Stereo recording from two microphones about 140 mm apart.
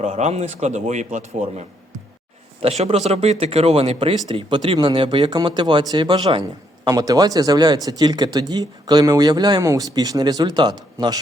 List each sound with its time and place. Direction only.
0.0 s a man's voice: 50° right (ahead or behind); by 11.2 s 30° right (ahead or behind)